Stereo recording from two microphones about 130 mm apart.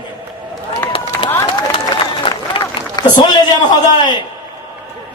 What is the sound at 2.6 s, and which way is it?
Run, 35° left (ahead or behind).